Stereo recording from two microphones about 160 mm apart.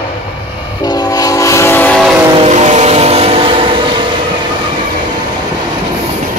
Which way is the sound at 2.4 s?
45° right (ahead or behind).